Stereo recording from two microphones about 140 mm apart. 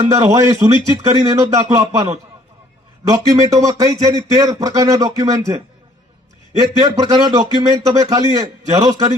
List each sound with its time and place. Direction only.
0.1 s speech: 20° right (ahead or behind)